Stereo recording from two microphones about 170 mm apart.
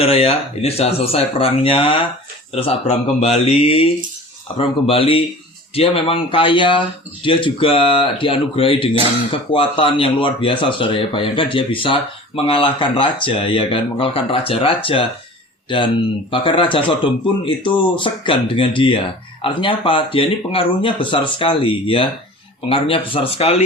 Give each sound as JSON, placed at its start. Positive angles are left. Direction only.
{"t": 0.0, "sound": "speech", "side_deg": 35}
{"t": 16.3, "sound": "speech", "side_deg": 30}